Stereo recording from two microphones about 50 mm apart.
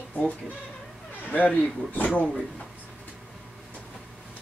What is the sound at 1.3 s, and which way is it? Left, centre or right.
Speech, left.